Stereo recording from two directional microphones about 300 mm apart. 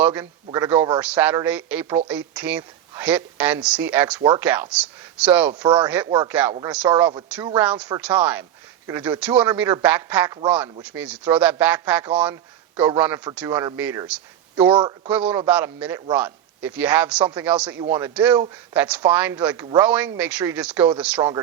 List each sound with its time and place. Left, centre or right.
0.0 s a man's voice: centre
5.6 s a man's voice: centre
15.1 s speech: centre
21.2 s a man's voice: centre